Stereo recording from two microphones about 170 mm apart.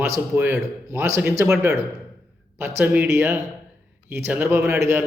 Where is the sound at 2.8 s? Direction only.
10° right (ahead or behind).